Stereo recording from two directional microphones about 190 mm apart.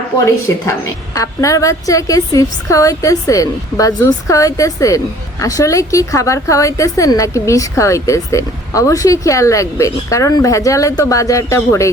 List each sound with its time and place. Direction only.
0.3 s a woman's voice: 15° left (ahead or behind)